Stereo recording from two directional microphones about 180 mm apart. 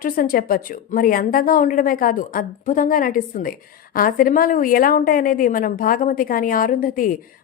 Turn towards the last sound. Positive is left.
turn(degrees=50)  # may be behind; listen again after turning